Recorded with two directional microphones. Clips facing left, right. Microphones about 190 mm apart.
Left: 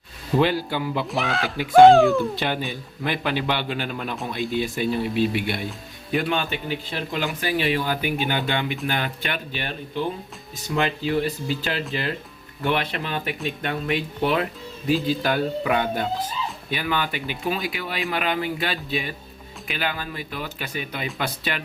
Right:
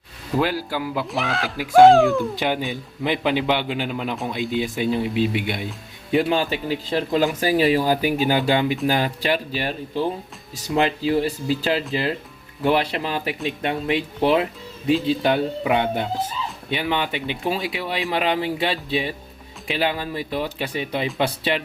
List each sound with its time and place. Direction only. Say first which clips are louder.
0.3 s speech: left 1 dB; 5° right (ahead or behind)
2.3 s a man's voice: right 3 dB; 15° right (ahead or behind)
6.1 s speech: right 4 dB; 30° right (ahead or behind)